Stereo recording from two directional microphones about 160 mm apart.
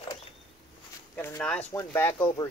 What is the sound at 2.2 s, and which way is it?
Speech, 25° left (ahead or behind).